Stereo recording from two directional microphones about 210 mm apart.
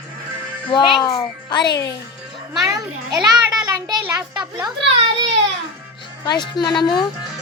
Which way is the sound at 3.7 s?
15° right (ahead or behind).